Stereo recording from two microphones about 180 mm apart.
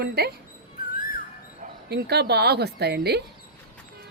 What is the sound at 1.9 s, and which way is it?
A woman's voice, 65° right (ahead or behind).